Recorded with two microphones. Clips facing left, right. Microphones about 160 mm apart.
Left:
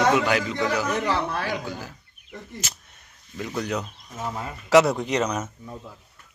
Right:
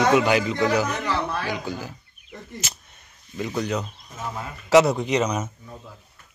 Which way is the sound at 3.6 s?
5° left (ahead or behind).